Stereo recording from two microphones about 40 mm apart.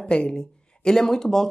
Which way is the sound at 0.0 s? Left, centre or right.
Left.